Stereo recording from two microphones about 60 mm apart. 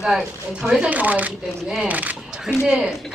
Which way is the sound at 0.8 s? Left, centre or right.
Right.